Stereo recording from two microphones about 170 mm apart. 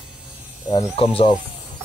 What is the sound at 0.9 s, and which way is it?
Speech, 35° left (ahead or behind).